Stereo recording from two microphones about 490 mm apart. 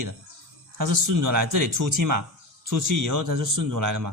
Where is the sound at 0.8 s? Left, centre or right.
Right.